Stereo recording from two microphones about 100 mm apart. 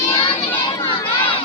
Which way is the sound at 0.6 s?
65° left (ahead or behind).